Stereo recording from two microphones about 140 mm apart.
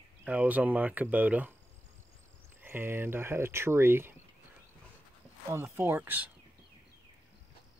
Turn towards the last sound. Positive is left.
turn(degrees=-15)  # may be behind; listen again after turning